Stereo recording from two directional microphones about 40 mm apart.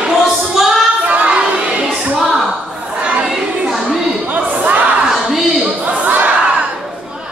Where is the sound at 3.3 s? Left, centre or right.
Centre.